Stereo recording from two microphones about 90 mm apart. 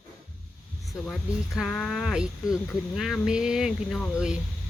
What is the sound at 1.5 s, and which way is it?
Speech, centre (ahead or behind).